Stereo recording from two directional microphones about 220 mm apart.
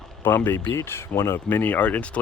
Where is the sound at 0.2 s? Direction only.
10° left (ahead or behind).